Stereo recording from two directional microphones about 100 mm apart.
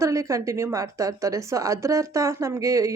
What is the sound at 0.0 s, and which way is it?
Speech, 30° right (ahead or behind).